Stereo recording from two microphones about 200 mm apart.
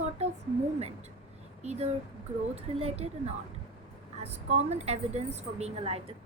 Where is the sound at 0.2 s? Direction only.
35° right (ahead or behind).